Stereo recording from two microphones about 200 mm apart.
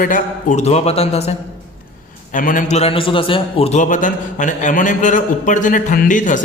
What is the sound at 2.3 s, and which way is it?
A man's voice, 40° left (ahead or behind).